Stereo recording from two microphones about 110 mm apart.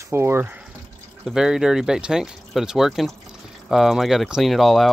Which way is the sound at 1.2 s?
5° right (ahead or behind).